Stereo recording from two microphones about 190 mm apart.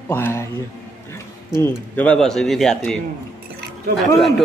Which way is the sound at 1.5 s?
10° left (ahead or behind).